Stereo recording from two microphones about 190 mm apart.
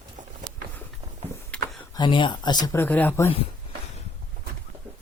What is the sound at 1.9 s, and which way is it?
Speech, 25° left (ahead or behind).